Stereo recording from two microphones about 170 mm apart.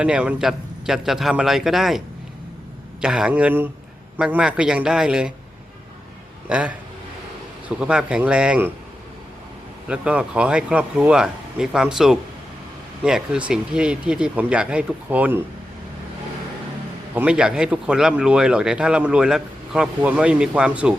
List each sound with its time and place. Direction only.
0.0 s speech: 5° right (ahead or behind)
3.0 s a man's voice: 5° right (ahead or behind)
6.5 s a man's voice: 5° right (ahead or behind)
7.8 s speech: 5° right (ahead or behind)
9.8 s speech: 5° right (ahead or behind)
17.2 s speech: 5° right (ahead or behind)